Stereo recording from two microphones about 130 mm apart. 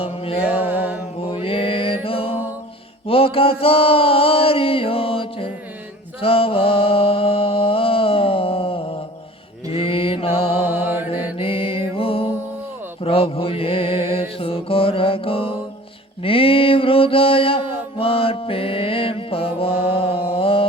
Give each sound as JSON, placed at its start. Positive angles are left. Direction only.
{"t": 0.0, "sound": "music", "side_deg": 45}
{"t": 0.7, "sound": "mantra", "side_deg": -10}
{"t": 1.2, "sound": "mantra", "side_deg": 45}
{"t": 3.1, "sound": "a sound", "side_deg": 45}
{"t": 6.1, "sound": "music", "side_deg": 45}
{"t": 9.7, "sound": "mantra", "side_deg": 45}
{"t": 11.3, "sound": "music", "side_deg": 45}
{"t": 16.2, "sound": "mantra", "side_deg": 45}